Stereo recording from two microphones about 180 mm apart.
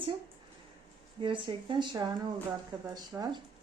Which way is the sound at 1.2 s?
25° right (ahead or behind).